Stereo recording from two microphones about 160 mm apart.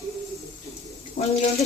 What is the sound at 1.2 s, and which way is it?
Speech, 60° left (ahead or behind).